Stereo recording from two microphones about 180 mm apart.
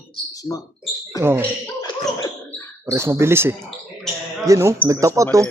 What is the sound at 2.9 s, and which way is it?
Speech, 15° right (ahead or behind).